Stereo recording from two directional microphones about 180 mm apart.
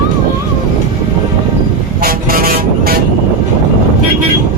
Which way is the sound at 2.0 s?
55° right (ahead or behind).